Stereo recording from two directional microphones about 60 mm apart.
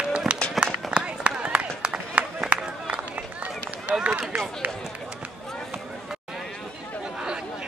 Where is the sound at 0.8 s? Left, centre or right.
Centre.